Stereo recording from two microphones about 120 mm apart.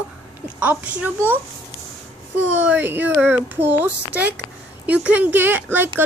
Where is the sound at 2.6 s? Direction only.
15° right (ahead or behind).